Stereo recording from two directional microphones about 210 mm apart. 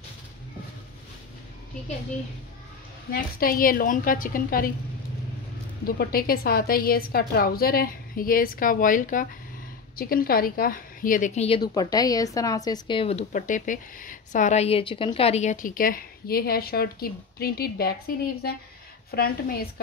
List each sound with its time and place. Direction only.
3.1 s a woman's voice: 45° left (ahead or behind)
5.9 s a woman's voice: 45° left (ahead or behind)